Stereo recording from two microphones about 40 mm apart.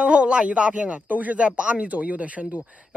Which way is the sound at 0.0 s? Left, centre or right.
Right.